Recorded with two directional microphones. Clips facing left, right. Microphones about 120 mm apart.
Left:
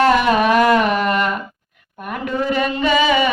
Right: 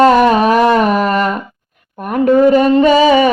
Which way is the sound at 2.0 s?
40° right (ahead or behind).